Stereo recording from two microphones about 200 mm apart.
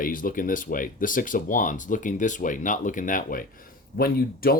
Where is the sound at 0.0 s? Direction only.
45° left (ahead or behind).